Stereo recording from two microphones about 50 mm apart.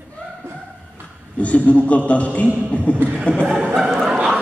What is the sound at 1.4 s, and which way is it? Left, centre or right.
Speech, left.